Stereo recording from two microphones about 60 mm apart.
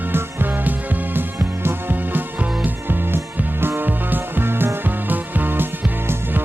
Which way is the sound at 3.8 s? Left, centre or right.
Right.